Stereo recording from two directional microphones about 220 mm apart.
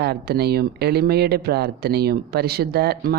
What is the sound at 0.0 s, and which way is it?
Speech, 45° right (ahead or behind).